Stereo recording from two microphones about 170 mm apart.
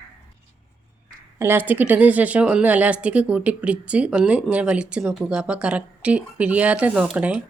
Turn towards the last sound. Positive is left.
turn(degrees=-5)  # may be behind; listen again after turning